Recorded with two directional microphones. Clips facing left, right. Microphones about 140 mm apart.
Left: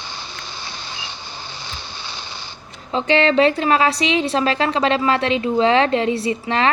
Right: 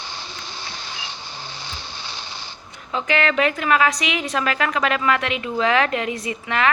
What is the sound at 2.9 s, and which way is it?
A woman's voice, 30° left (ahead or behind).